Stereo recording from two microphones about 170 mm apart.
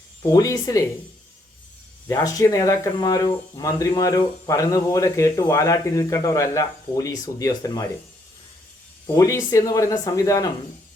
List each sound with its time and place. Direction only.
0.2 s speech: 20° left (ahead or behind)
2.0 s speech: 20° left (ahead or behind)
9.0 s speech: 15° left (ahead or behind)